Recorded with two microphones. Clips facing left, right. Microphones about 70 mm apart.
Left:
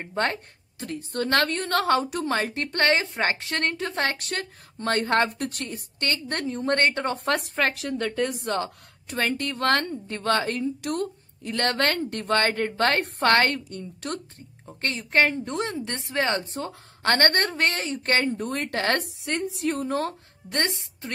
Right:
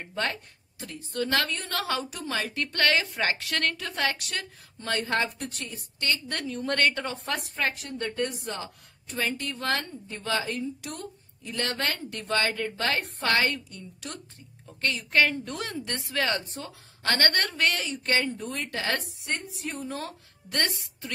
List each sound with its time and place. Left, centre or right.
0.0 s a woman's voice: left
14.7 s a woman's voice: left
16.5 s a woman's voice: left
19.2 s a woman's voice: left
20.5 s a woman's voice: left